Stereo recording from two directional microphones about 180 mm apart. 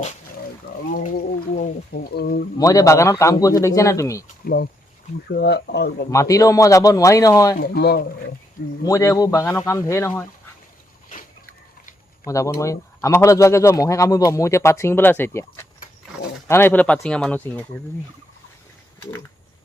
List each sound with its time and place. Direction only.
1.5 s speech: 55° left (ahead or behind)
2.6 s speech: 20° left (ahead or behind)
4.4 s speech: 65° left (ahead or behind)
6.1 s a man's voice: 20° left (ahead or behind)
7.6 s speech: 60° left (ahead or behind)
8.9 s speech: 15° left (ahead or behind)
12.5 s speech: 15° left (ahead or behind)